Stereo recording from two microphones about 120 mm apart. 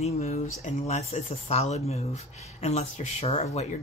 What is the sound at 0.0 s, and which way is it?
Speech, 65° left (ahead or behind).